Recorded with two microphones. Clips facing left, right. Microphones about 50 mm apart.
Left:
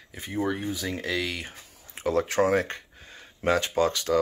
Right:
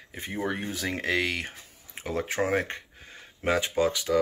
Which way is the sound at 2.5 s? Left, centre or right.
Right.